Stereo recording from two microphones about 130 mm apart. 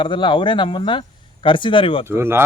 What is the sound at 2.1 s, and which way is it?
Speech, 20° right (ahead or behind).